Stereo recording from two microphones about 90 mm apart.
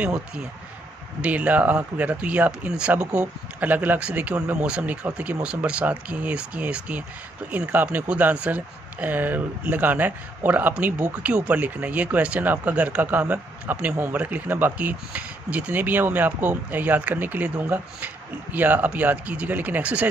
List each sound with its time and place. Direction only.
1.2 s speech: 15° right (ahead or behind)